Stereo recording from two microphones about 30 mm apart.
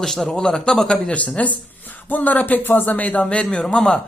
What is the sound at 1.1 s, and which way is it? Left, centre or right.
Speech, left.